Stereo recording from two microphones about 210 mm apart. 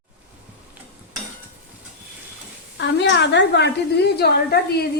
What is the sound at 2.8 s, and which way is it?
A woman's voice, 55° left (ahead or behind).